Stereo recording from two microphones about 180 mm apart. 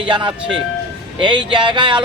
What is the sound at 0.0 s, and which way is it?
Speech, 25° right (ahead or behind).